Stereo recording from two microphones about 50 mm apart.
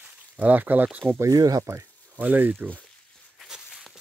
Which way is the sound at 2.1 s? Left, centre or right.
Right.